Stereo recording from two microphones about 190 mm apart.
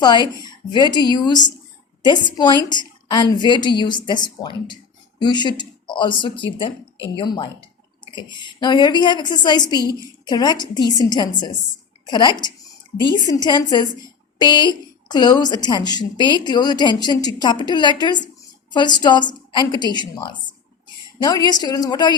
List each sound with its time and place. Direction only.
0.0 s a woman's voice: 25° left (ahead or behind)